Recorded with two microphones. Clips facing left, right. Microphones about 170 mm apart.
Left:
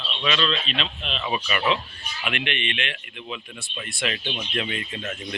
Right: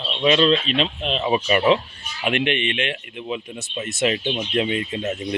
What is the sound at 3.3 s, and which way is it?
Speech, 20° right (ahead or behind).